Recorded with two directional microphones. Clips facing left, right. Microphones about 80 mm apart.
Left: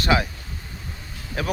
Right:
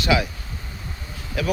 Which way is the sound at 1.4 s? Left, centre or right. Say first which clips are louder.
Right 2 dB; left.